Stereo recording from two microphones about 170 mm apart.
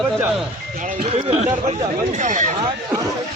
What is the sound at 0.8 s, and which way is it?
Speech, 50° right (ahead or behind).